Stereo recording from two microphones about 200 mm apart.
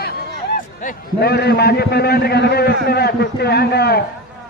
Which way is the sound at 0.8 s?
50° left (ahead or behind).